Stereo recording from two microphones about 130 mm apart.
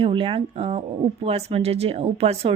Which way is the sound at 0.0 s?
45° right (ahead or behind).